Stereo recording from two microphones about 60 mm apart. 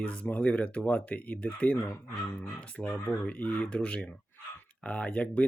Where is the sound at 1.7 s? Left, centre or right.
Left.